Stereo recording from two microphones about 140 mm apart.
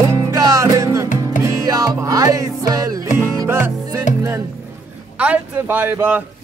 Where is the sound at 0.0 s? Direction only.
20° right (ahead or behind).